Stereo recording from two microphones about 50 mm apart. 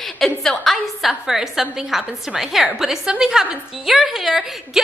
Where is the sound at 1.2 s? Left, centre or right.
Centre.